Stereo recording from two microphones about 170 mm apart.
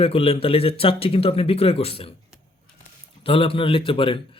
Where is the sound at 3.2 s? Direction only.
35° left (ahead or behind).